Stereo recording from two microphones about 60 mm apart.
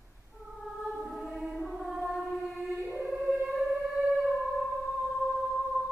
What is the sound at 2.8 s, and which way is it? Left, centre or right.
Music, centre.